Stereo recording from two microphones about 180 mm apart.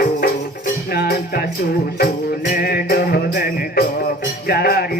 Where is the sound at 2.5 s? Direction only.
55° left (ahead or behind).